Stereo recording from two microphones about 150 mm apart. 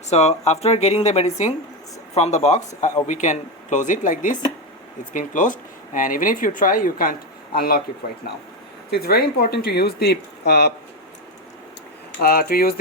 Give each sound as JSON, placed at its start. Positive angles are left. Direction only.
{"t": 0.1, "sound": "speech", "side_deg": 45}
{"t": 8.9, "sound": "speech", "side_deg": 90}
{"t": 12.2, "sound": "speech", "side_deg": 90}